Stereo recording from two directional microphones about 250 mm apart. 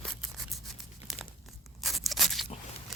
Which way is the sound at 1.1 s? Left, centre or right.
Centre.